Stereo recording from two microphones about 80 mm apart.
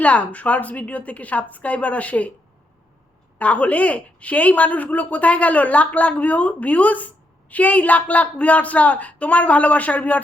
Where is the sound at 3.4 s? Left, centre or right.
Centre.